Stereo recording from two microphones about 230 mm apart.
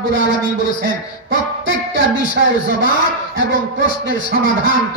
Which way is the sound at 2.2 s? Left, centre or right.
Right.